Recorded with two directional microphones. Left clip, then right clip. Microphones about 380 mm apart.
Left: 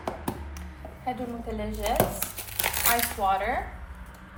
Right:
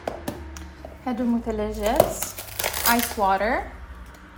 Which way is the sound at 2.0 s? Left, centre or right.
Centre.